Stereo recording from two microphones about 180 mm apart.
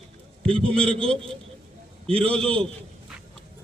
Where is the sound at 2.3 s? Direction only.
5° left (ahead or behind).